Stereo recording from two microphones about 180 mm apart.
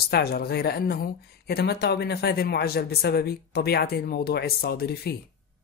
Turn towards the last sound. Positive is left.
turn(degrees=60)  # may be behind; listen again after turning